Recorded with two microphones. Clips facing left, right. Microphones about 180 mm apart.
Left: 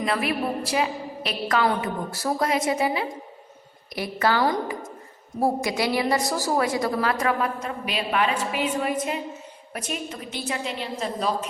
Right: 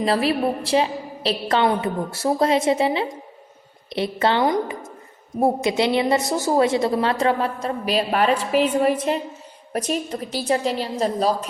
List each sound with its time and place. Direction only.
0.0 s a woman's voice: 30° right (ahead or behind)